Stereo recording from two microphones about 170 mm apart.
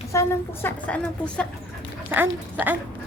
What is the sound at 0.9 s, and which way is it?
Speech, 5° left (ahead or behind).